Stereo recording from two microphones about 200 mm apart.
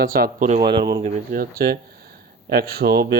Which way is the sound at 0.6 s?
20° right (ahead or behind).